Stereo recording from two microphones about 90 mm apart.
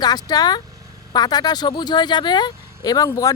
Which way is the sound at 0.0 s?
50° left (ahead or behind).